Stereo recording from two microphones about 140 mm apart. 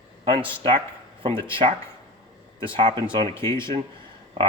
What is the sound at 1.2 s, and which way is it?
Speech, 40° right (ahead or behind).